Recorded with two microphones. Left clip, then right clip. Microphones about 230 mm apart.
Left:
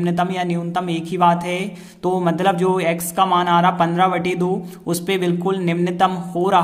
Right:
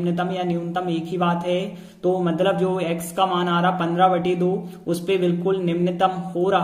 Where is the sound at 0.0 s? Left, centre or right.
Left.